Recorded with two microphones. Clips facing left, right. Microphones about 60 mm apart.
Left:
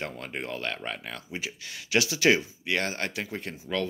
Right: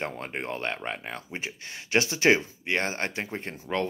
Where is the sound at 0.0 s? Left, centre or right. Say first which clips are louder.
Right 2 dB; right.